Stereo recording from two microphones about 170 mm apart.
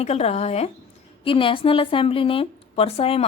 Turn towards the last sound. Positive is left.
turn(degrees=35)  # may be behind; listen again after turning